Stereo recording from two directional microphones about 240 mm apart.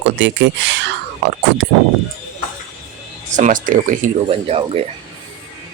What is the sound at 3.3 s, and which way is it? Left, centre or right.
Speech, right.